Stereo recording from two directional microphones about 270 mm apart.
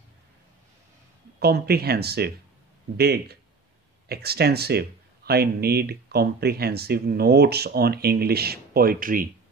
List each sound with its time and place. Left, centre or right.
1.4 s speech: right